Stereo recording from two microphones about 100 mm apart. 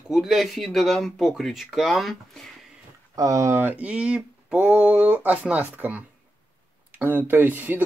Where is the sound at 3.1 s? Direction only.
35° right (ahead or behind); by 6.0 s 15° right (ahead or behind).